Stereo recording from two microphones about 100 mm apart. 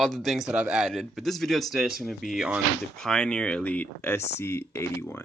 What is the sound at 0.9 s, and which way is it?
Speech, centre (ahead or behind).